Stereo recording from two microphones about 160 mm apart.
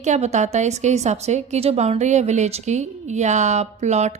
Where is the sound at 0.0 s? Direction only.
45° right (ahead or behind).